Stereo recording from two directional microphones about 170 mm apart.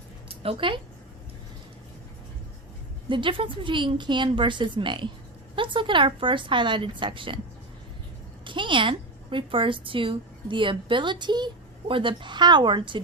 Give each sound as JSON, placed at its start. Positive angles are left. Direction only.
{"t": 0.3, "sound": "a woman's voice", "side_deg": -35}
{"t": 3.1, "sound": "a woman's voice", "side_deg": -30}
{"t": 8.4, "sound": "a woman's voice", "side_deg": -30}